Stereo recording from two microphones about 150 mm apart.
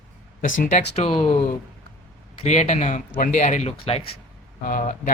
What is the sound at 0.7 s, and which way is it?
Speech, 45° left (ahead or behind).